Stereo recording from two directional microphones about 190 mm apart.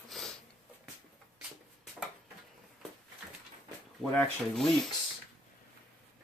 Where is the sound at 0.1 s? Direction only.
Centre (ahead or behind).